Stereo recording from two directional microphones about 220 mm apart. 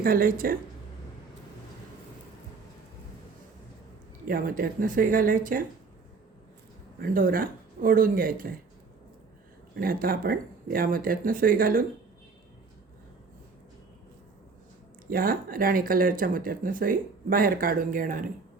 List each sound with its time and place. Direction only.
0.0 s speech: 40° right (ahead or behind)
4.3 s speech: 40° right (ahead or behind)
7.0 s speech: 40° right (ahead or behind)
9.7 s speech: 40° right (ahead or behind)
15.1 s speech: 40° right (ahead or behind)